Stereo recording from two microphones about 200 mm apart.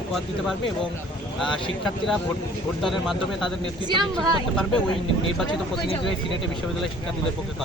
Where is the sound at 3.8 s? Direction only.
20° right (ahead or behind).